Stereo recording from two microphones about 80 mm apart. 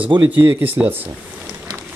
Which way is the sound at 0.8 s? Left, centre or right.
Centre.